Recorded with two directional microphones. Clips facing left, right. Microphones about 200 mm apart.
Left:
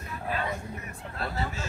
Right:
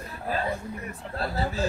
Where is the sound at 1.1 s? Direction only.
35° right (ahead or behind).